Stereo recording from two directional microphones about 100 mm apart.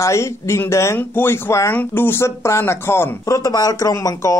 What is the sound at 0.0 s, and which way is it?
Speech, 30° left (ahead or behind).